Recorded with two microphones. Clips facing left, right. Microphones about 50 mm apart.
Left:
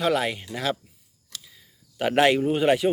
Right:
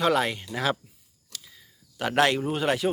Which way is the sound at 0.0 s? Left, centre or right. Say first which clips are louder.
Even; centre.